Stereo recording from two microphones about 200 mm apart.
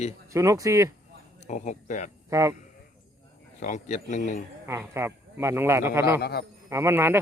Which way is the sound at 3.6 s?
35° left (ahead or behind).